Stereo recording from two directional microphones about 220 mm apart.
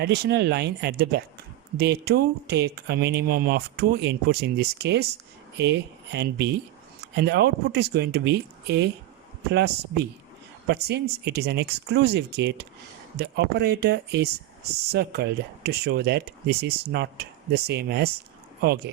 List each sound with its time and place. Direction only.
0.0 s speech: 50° right (ahead or behind)